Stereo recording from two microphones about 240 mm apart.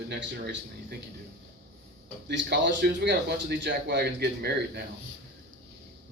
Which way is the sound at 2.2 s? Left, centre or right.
Right.